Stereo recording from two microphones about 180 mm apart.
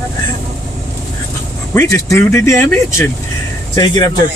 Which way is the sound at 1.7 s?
15° left (ahead or behind).